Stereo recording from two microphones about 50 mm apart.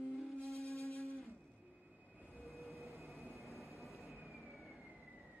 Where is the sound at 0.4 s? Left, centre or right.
Right.